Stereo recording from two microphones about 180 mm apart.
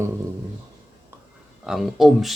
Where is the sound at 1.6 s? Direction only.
Centre (ahead or behind).